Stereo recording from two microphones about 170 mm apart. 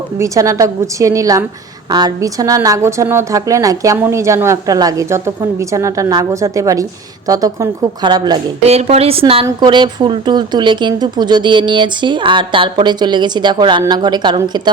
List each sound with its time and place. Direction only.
0.2 s a woman's voice: 20° right (ahead or behind)
8.6 s a woman's voice: 40° right (ahead or behind)